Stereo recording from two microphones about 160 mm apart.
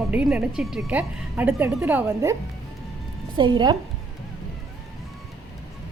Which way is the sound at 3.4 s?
30° right (ahead or behind).